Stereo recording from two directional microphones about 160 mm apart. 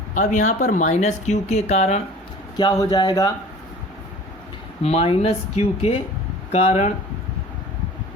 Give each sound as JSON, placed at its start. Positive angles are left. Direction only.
{"t": 0.1, "sound": "speech", "side_deg": 50}
{"t": 2.6, "sound": "speech", "side_deg": 25}
{"t": 4.8, "sound": "speech", "side_deg": 40}